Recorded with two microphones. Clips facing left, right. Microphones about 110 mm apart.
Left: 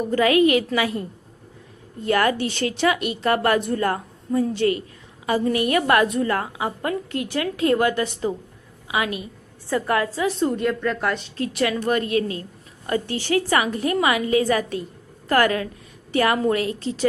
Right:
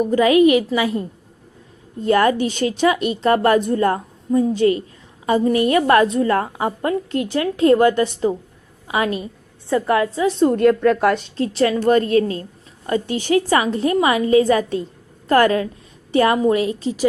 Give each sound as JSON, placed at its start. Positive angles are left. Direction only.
{"t": 0.0, "sound": "a woman's voice", "side_deg": -20}
{"t": 9.6, "sound": "a woman's voice", "side_deg": -20}
{"t": 10.7, "sound": "a woman's voice", "side_deg": -5}
{"t": 11.3, "sound": "a woman's voice", "side_deg": -30}
{"t": 12.9, "sound": "a woman's voice", "side_deg": -20}